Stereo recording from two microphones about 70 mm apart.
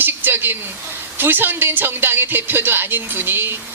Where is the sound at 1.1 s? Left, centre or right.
Right.